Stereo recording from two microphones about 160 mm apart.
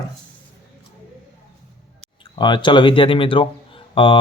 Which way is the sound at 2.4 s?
30° left (ahead or behind).